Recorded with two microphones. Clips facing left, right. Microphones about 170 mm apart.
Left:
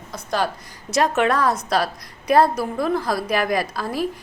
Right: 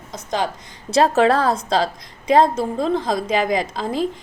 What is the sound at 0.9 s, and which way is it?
A woman's voice, 30° right (ahead or behind).